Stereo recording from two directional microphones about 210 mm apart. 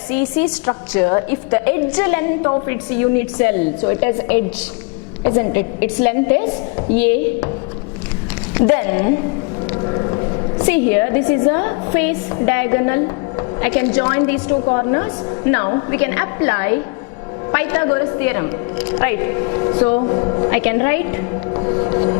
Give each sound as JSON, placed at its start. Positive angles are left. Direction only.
{"t": 0.1, "sound": "a woman's voice", "side_deg": 10}
{"t": 8.5, "sound": "a woman's voice", "side_deg": 15}
{"t": 9.8, "sound": "a sound", "side_deg": 20}
{"t": 10.7, "sound": "a woman's voice", "side_deg": 10}